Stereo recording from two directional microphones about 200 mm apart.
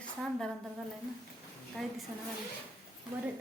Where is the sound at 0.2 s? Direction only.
Centre (ahead or behind).